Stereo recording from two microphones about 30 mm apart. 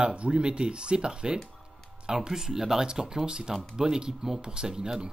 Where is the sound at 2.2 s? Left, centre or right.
Centre.